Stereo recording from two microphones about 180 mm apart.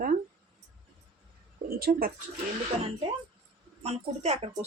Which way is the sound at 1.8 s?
60° right (ahead or behind).